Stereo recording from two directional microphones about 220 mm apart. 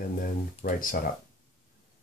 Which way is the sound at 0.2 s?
40° left (ahead or behind).